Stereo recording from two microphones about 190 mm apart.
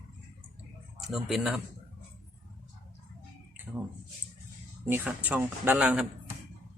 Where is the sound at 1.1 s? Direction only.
Centre (ahead or behind).